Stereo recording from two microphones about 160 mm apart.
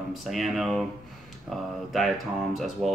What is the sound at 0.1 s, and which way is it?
Speech, centre (ahead or behind).